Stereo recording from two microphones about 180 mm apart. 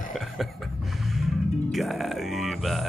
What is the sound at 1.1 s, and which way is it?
Speech, centre (ahead or behind).